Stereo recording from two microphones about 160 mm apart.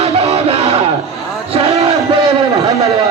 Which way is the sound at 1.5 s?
40° right (ahead or behind).